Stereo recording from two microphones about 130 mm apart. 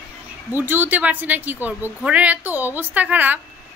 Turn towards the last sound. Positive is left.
turn(degrees=-10)  # may be behind; listen again after turning